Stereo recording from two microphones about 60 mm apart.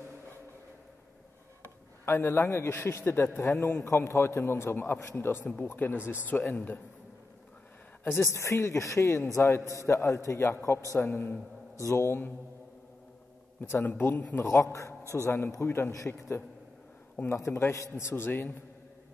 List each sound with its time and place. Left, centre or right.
2.0 s a man's voice: left
8.0 s a man's voice: left
11.1 s a man's voice: left
11.8 s a man's voice: left
13.6 s a man's voice: left